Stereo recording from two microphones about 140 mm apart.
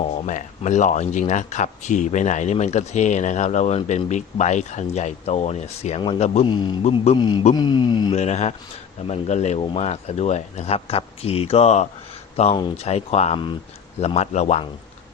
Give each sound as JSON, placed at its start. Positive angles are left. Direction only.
{"t": 0.0, "sound": "speech", "side_deg": 60}
{"t": 6.4, "sound": "speech", "side_deg": 35}
{"t": 6.8, "sound": "speech", "side_deg": 45}
{"t": 7.2, "sound": "speech", "side_deg": 30}
{"t": 8.1, "sound": "speech", "side_deg": 50}